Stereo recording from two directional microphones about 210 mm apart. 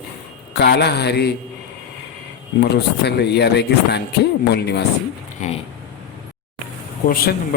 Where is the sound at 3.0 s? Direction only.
55° left (ahead or behind).